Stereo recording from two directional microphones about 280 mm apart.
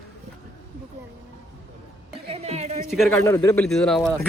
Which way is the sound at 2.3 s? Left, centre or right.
Right.